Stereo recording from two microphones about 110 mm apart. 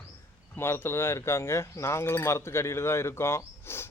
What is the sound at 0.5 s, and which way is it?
Speech, 20° left (ahead or behind).